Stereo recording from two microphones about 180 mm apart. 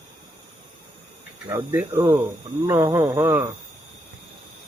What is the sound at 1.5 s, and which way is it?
Speech, 15° right (ahead or behind).